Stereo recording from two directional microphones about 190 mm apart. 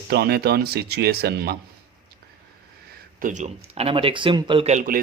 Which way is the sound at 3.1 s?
40° right (ahead or behind).